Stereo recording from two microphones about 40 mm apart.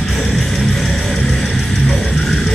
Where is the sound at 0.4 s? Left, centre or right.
Centre.